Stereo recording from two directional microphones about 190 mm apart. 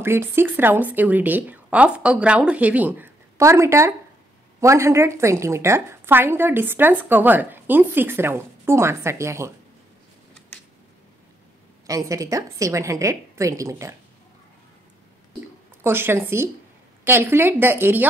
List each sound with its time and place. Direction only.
0.0 s a woman's voice: 10° right (ahead or behind)
11.8 s a woman's voice: 15° right (ahead or behind)
15.8 s a woman's voice: 10° right (ahead or behind)